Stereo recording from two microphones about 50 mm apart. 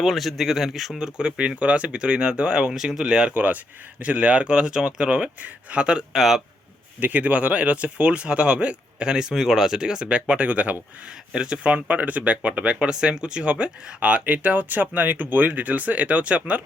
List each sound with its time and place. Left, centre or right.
0.0 s speech: centre
6.1 s speech: centre
7.0 s speech: right
11.3 s speech: centre